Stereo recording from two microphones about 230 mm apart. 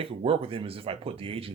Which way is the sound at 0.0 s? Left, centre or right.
Right.